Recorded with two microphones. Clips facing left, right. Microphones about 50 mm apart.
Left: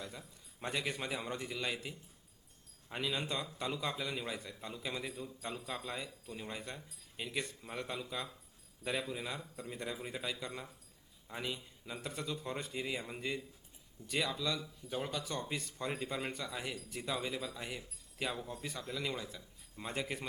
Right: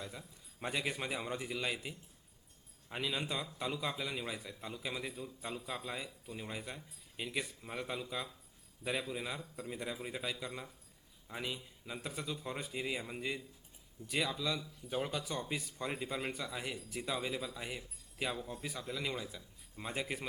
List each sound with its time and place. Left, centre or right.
0.0 s a man's voice: centre